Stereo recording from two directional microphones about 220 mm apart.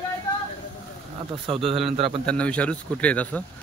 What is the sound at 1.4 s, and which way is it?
Speech, 25° right (ahead or behind).